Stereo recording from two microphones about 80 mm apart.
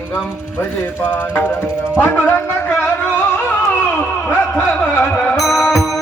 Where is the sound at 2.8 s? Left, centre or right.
Left.